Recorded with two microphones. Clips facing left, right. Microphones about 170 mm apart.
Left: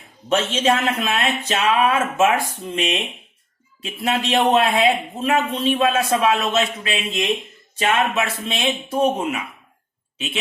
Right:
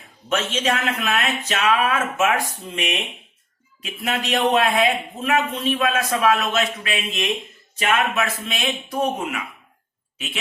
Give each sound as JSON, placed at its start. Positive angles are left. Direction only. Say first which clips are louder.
{"t": 0.3, "sound": "a man's voice", "louder": "left 4 dB", "side_deg": 30}